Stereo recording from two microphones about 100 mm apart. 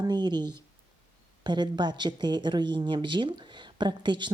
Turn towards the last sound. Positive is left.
turn(degrees=-50)  # may be behind; listen again after turning